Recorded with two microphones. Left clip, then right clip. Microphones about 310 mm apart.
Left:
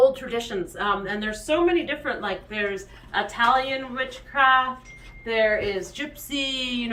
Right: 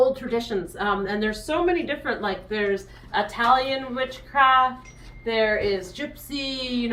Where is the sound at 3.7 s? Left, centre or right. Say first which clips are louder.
Right 1 dB; centre.